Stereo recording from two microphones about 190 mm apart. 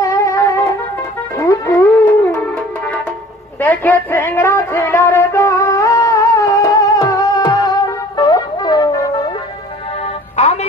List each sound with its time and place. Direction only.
0.0 s music: 15° left (ahead or behind)
3.5 s music: 10° left (ahead or behind)
10.3 s music: 35° left (ahead or behind)